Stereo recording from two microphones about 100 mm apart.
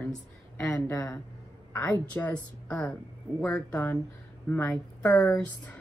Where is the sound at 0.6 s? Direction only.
30° left (ahead or behind).